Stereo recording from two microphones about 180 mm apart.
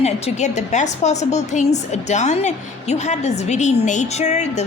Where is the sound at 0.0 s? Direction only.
40° left (ahead or behind).